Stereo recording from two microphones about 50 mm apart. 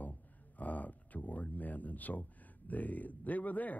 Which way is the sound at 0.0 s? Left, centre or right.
Left.